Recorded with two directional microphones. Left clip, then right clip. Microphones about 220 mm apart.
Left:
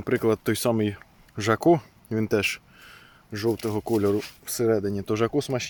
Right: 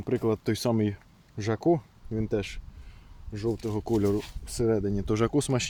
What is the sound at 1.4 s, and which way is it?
Speech, 20° left (ahead or behind).